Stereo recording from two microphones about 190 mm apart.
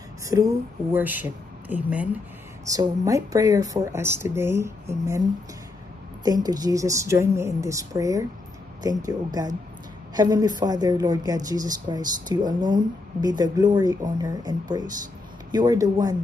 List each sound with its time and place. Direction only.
0.3 s speech: 15° right (ahead or behind)
6.2 s speech: 20° right (ahead or behind)